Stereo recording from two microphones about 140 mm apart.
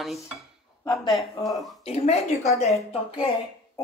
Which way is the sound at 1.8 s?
50° left (ahead or behind).